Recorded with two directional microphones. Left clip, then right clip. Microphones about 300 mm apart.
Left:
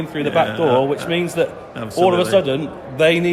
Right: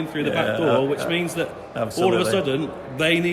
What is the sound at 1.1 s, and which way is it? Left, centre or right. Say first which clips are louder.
Speech: left 5 dB; centre.